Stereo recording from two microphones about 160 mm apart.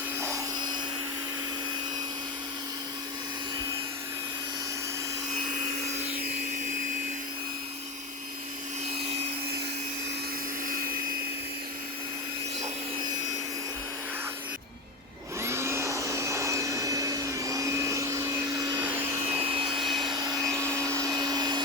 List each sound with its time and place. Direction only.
15.4 s vacuum cleaner: 15° right (ahead or behind)
18.8 s vacuum cleaner: 10° right (ahead or behind)
19.4 s vacuum cleaner: 35° right (ahead or behind)
19.8 s vacuum cleaner: centre (ahead or behind)
20.1 s vacuum cleaner: 25° right (ahead or behind)